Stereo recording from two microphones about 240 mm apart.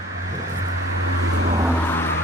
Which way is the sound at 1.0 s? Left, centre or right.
Right.